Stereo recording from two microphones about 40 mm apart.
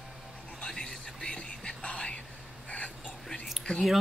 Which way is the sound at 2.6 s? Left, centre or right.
Left.